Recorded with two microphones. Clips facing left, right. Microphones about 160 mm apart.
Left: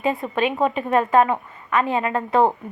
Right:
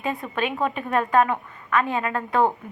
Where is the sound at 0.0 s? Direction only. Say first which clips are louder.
Left 5 dB; centre (ahead or behind).